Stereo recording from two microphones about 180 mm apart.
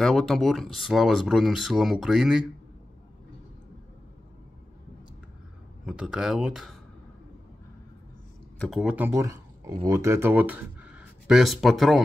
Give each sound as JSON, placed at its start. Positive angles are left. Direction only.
{"t": 0.0, "sound": "speech", "side_deg": 0}
{"t": 5.9, "sound": "speech", "side_deg": -5}
{"t": 8.5, "sound": "speech", "side_deg": 0}
{"t": 8.9, "sound": "speech", "side_deg": -15}